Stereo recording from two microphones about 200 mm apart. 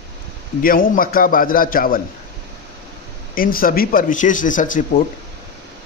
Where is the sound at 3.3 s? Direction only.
45° left (ahead or behind).